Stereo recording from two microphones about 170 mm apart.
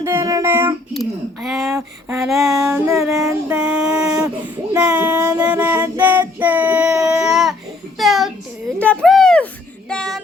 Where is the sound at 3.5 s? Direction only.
5° right (ahead or behind).